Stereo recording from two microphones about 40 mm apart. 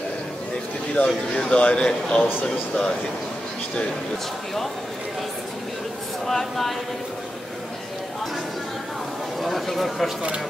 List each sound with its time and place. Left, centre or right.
1.0 s speech: left
6.2 s speech: centre
9.4 s speech: centre